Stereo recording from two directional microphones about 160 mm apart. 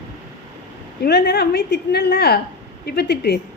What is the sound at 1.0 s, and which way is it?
A woman's voice, 80° left.